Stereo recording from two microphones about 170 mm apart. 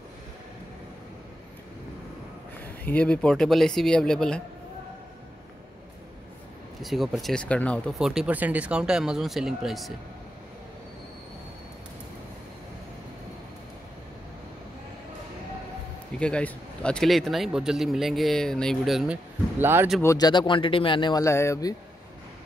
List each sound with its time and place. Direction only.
2.6 s a man's voice: 10° left (ahead or behind)
6.8 s a man's voice: centre (ahead or behind)
8.0 s a man's voice: 5° right (ahead or behind)
16.2 s a man's voice: 5° left (ahead or behind)
19.6 s speech: 15° right (ahead or behind)
20.0 s speech: 20° left (ahead or behind)